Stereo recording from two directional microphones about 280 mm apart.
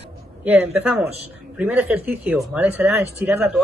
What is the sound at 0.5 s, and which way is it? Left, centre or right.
Speech, centre.